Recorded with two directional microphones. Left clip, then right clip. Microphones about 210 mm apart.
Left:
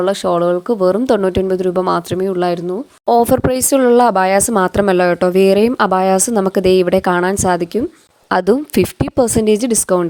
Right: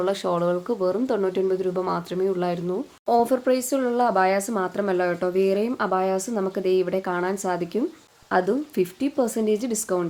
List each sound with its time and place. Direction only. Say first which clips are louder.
0.0 s speech: left 9 dB; 30° left (ahead or behind)
8.3 s speech: left 9 dB; 45° left (ahead or behind)